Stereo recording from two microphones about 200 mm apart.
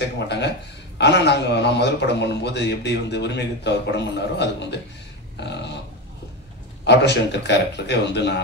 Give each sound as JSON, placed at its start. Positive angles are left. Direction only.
{"t": 0.0, "sound": "a man's voice", "side_deg": 60}
{"t": 6.8, "sound": "a man's voice", "side_deg": 60}